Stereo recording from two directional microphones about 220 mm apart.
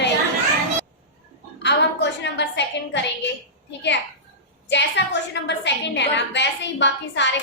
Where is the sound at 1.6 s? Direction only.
50° left (ahead or behind).